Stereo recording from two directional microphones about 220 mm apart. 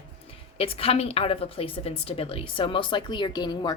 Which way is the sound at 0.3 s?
25° left (ahead or behind).